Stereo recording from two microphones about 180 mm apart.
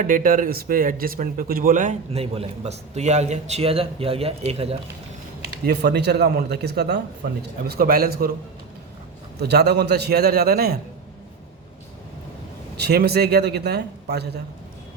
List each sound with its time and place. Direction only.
0.0 s speech: 50° right (ahead or behind); by 4.8 s 35° right (ahead or behind)
5.6 s a man's voice: 65° right (ahead or behind)
7.7 s a man's voice: 55° right (ahead or behind)
9.4 s a man's voice: 65° right (ahead or behind)
12.7 s a man's voice: 65° right (ahead or behind)